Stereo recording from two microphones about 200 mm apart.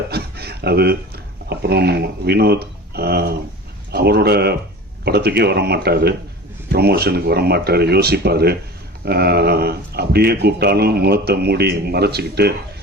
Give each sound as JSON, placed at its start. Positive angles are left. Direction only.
{"t": 0.1, "sound": "speech", "side_deg": -50}